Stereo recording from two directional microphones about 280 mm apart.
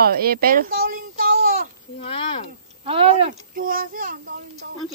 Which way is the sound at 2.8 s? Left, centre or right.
Centre.